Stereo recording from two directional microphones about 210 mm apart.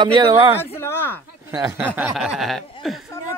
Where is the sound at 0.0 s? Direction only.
20° right (ahead or behind).